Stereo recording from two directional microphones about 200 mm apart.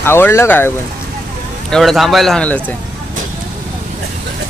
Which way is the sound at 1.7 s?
Centre (ahead or behind).